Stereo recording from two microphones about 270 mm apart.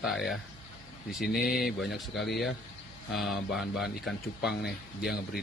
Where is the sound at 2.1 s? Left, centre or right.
Left.